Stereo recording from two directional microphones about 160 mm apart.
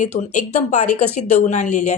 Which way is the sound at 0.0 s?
50° left (ahead or behind).